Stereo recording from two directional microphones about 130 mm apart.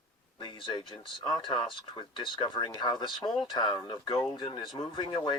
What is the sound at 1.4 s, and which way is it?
Speech, 40° left (ahead or behind).